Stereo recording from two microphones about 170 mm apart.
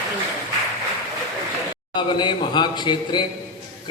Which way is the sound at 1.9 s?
25° left (ahead or behind).